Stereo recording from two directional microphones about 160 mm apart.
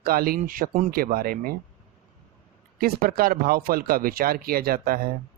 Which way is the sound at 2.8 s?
70° right (ahead or behind).